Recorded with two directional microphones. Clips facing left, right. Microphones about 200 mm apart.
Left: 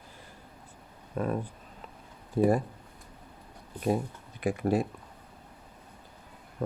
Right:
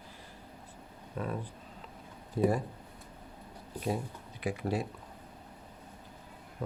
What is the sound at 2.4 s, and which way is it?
Speech, 50° left (ahead or behind).